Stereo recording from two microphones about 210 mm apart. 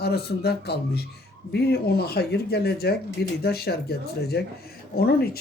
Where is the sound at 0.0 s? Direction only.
50° left (ahead or behind).